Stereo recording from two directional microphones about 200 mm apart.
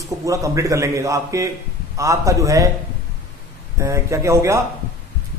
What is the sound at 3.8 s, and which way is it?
Speech, 15° right (ahead or behind).